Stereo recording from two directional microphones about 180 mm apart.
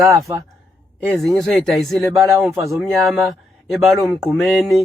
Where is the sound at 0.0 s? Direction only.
15° right (ahead or behind).